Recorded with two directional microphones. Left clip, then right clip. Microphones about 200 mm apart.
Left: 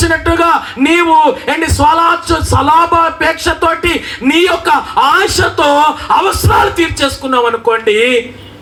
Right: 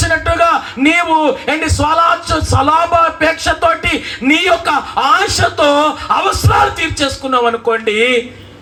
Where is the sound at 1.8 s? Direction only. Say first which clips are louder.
Left 3 dB; 20° left (ahead or behind).